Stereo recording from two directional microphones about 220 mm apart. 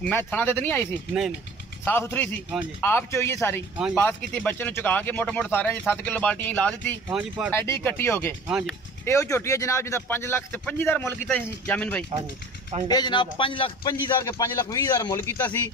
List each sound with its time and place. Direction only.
0.0 s speech: 10° left (ahead or behind)
1.9 s speech: 10° left (ahead or behind)
7.1 s speech: 5° right (ahead or behind)
7.5 s speech: 10° left (ahead or behind)
8.5 s speech: 5° right (ahead or behind)
9.0 s speech: 15° left (ahead or behind)
12.8 s a man's voice: 20° left (ahead or behind)